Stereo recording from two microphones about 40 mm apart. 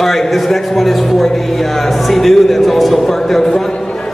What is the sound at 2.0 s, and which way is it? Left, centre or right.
Speech, centre.